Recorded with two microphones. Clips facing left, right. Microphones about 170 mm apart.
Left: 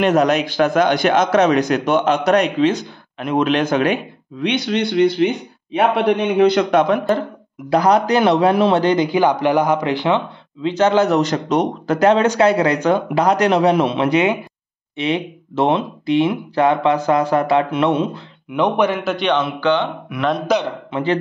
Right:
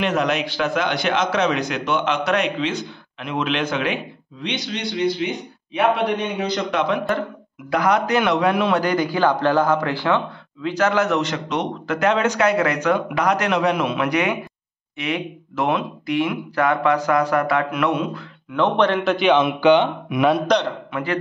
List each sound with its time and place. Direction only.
0.0 s a man's voice: 45° left (ahead or behind); by 6.8 s 60° left (ahead or behind)
7.7 s a man's voice: 35° left (ahead or behind)
18.5 s a man's voice: 10° left (ahead or behind)
19.4 s speech: 15° right (ahead or behind)
20.5 s a man's voice: 5° left (ahead or behind)
20.9 s speech: 25° left (ahead or behind)